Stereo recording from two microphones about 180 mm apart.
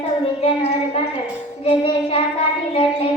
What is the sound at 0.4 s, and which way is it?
Child singing, 30° left (ahead or behind).